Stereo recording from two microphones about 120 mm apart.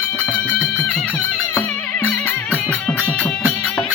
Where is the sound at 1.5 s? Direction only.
15° left (ahead or behind).